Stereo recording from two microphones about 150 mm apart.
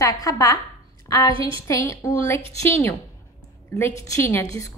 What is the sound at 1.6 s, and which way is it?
Speech, 20° left (ahead or behind).